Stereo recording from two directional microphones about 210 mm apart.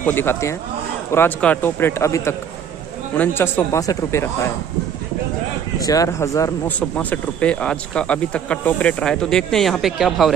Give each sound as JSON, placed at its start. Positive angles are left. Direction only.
{"t": 0.0, "sound": "a man's voice", "side_deg": 10}
{"t": 5.8, "sound": "a man's voice", "side_deg": 15}